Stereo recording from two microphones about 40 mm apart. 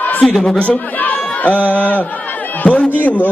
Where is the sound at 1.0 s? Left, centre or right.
Left.